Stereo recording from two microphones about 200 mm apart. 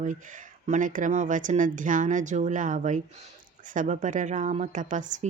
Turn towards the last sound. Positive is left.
turn(degrees=-40)  # may be behind; listen again after turning